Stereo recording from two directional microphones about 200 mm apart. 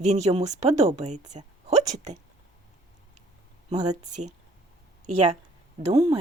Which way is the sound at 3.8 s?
40° right (ahead or behind).